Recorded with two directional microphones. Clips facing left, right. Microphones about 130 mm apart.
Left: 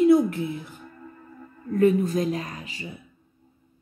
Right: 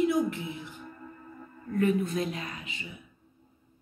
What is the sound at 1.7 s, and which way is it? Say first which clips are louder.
A woman's voice: left 6 dB; 35° left (ahead or behind).